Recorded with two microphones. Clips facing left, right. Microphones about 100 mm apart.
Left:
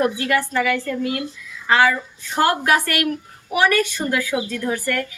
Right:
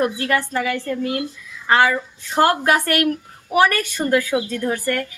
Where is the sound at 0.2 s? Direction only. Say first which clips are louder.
Left 1 dB; 30° right (ahead or behind).